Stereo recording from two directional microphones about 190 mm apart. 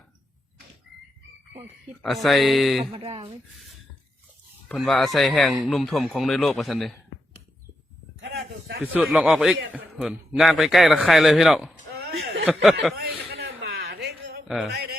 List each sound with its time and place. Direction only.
2.0 s a man's voice: centre (ahead or behind)
2.9 s speech: 30° right (ahead or behind)
4.7 s a man's voice: centre (ahead or behind)
8.2 s a sound: 60° right (ahead or behind)
8.8 s a man's voice: 5° right (ahead or behind)
12.2 s a sound: 90° right
13.0 s a sound: 60° right (ahead or behind)
14.4 s speech: centre (ahead or behind)
14.7 s a man's voice: 60° right (ahead or behind)